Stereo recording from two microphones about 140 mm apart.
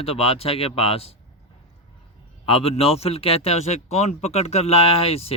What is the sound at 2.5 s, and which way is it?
Speech, 45° left (ahead or behind).